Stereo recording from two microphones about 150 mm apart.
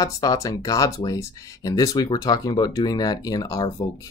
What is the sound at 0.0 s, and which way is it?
Speech, 25° left (ahead or behind).